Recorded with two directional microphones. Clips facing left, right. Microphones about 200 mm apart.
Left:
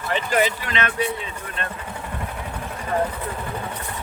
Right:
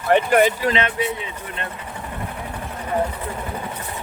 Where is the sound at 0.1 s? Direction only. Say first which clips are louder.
Right 6 dB; 60° right (ahead or behind).